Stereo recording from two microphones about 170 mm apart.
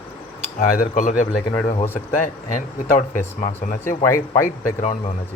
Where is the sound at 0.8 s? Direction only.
50° left (ahead or behind).